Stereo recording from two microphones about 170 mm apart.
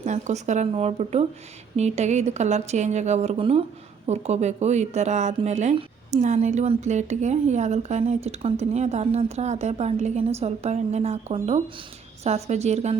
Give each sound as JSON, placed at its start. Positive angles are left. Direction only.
{"t": 0.0, "sound": "speech", "side_deg": -45}